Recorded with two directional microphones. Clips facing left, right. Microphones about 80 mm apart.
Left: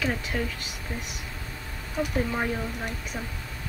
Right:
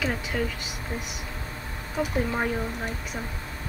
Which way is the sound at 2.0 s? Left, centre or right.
Centre.